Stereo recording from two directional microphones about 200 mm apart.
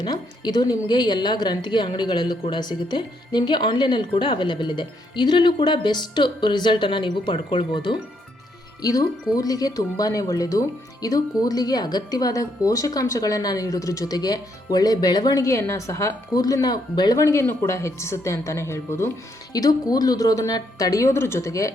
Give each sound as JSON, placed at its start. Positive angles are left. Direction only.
{"t": 0.0, "sound": "a woman's voice", "side_deg": 20}